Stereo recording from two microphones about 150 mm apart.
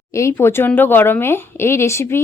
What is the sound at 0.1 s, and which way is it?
A woman's voice, 20° left (ahead or behind).